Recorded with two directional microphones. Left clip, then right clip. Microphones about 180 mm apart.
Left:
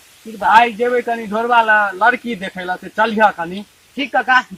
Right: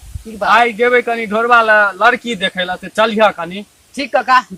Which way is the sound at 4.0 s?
35° right (ahead or behind).